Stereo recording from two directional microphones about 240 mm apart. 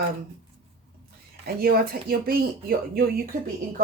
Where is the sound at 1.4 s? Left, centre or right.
Right.